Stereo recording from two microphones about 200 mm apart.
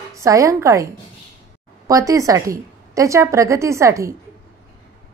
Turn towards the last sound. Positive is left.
turn(degrees=-15)  # may be behind; listen again after turning